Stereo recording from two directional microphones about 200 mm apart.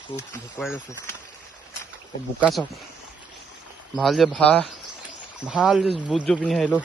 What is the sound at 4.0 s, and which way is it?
Speech, centre (ahead or behind).